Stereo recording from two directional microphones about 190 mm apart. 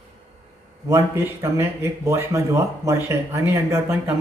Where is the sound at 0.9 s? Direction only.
15° right (ahead or behind).